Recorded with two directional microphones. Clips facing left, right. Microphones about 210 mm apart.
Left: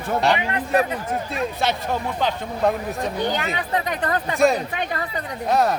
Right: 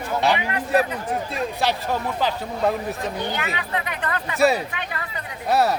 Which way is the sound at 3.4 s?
40° left (ahead or behind).